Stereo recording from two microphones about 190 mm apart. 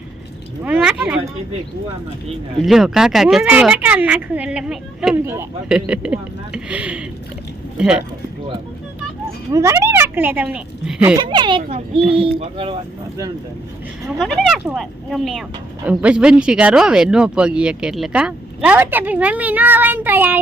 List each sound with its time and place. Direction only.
0.6 s a sound: 10° right (ahead or behind)
2.6 s speech: centre (ahead or behind)
9.5 s speech: 15° right (ahead or behind)
11.2 s speech: 25° right (ahead or behind)
14.2 s speech: centre (ahead or behind)